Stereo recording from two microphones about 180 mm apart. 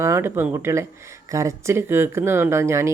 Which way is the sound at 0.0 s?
15° right (ahead or behind).